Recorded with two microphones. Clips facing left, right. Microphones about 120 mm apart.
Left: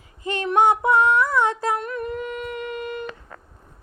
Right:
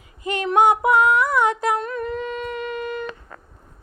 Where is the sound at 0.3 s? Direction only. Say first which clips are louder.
Right 1 dB; 20° right (ahead or behind).